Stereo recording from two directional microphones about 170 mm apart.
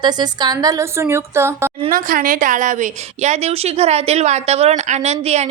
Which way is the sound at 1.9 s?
55° right (ahead or behind).